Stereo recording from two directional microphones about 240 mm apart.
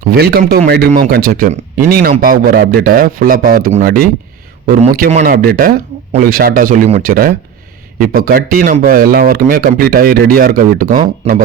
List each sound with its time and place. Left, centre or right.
0.2 s speech: right